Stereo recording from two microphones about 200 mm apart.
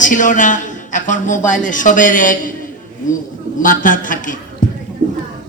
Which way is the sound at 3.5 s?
40° left (ahead or behind).